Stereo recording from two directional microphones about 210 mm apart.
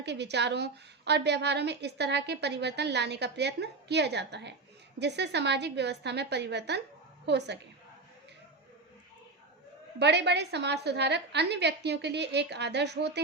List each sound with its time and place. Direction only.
0.0 s a woman's voice: 55° right (ahead or behind)
10.0 s a woman's voice: 55° right (ahead or behind)